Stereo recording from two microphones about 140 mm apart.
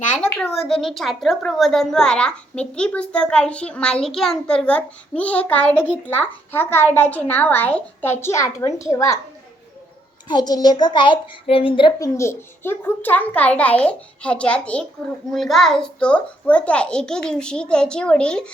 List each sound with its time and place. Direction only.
0.3 s a child's voice: centre (ahead or behind); by 9.1 s 20° left (ahead or behind)
10.2 s a child's voice: 30° left (ahead or behind)
11.9 s a child's voice: 20° left (ahead or behind); by 18.4 s 5° left (ahead or behind)